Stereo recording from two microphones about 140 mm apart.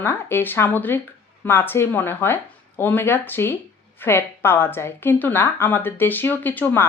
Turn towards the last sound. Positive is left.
turn(degrees=15)  # may be behind; listen again after turning